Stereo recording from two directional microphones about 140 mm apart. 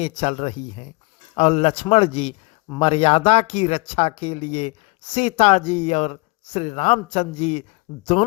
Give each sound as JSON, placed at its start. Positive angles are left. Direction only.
{"t": 0.0, "sound": "speech", "side_deg": 45}